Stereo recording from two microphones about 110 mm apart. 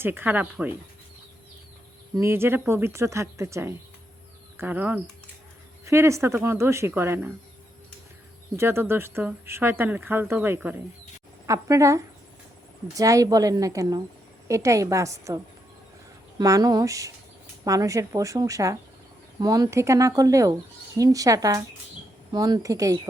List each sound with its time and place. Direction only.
0.0 s speech: 15° right (ahead or behind)
2.2 s a woman's voice: 20° right (ahead or behind)
5.8 s a woman's voice: 25° right (ahead or behind)
8.5 s a woman's voice: 20° right (ahead or behind)
11.4 s a woman's voice: 30° right (ahead or behind)
16.4 s speech: 35° right (ahead or behind)